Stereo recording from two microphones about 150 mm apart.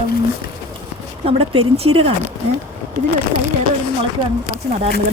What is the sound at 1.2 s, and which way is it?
Speech, 40° right (ahead or behind).